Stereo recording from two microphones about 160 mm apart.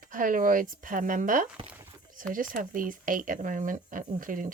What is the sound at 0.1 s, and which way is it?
Speech, 55° right (ahead or behind).